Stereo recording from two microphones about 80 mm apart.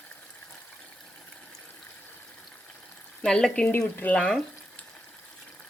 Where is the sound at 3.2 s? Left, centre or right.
Centre.